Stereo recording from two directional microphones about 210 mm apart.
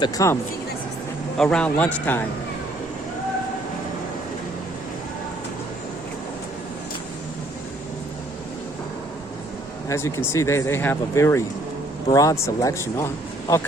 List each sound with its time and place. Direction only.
0.0 s speech: 15° left (ahead or behind)
1.4 s a man's voice: 5° left (ahead or behind)
9.9 s speech: 10° left (ahead or behind)